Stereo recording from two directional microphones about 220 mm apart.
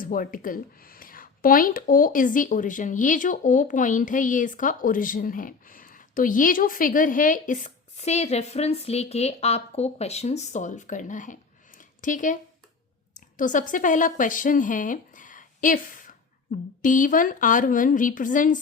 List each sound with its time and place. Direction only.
0.0 s a woman's voice: 40° left (ahead or behind)
11.8 s a sound: 35° left (ahead or behind)
13.1 s a woman's voice: 35° left (ahead or behind)